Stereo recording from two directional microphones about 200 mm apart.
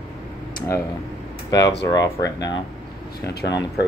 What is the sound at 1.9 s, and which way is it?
Speech, 20° left (ahead or behind).